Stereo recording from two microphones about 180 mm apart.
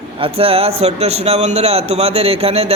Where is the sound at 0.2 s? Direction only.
30° right (ahead or behind).